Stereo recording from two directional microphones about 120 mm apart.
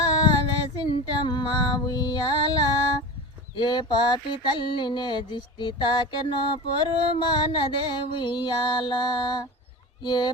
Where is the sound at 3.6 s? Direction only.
40° left (ahead or behind).